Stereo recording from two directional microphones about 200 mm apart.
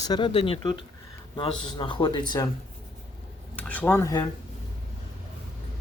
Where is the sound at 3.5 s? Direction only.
10° left (ahead or behind).